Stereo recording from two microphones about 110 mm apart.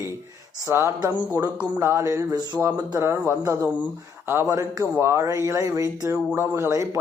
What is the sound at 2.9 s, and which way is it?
Speech, 25° right (ahead or behind).